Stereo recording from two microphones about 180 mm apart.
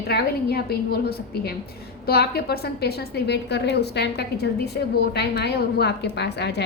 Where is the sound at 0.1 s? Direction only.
60° left (ahead or behind).